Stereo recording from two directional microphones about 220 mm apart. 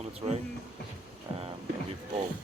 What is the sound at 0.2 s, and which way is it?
Speech, 25° right (ahead or behind).